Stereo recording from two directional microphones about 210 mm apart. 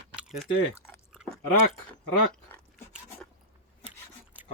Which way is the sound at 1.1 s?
5° right (ahead or behind).